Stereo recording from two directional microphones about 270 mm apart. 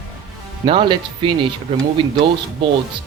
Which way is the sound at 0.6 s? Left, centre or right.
Centre.